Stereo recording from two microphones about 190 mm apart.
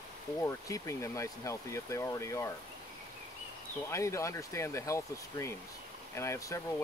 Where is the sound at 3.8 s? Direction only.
15° left (ahead or behind).